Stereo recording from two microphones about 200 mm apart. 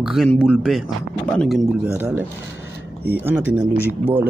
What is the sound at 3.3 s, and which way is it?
Speech, 10° right (ahead or behind).